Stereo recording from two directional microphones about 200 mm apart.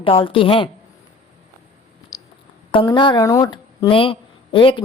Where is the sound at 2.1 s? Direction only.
20° left (ahead or behind).